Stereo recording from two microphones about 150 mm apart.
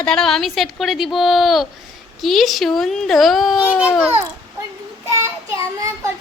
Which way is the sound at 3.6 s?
10° right (ahead or behind).